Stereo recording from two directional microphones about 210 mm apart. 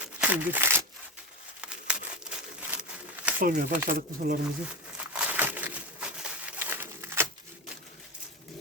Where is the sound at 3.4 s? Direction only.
45° right (ahead or behind).